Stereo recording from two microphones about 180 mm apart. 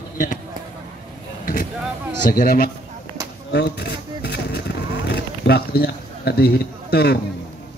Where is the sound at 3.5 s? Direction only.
70° left (ahead or behind).